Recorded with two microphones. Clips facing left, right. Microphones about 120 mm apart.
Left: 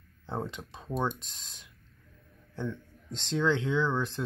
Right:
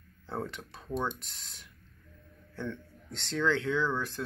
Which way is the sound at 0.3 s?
20° left (ahead or behind).